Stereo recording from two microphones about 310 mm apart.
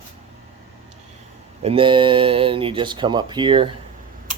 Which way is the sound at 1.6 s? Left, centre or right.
Centre.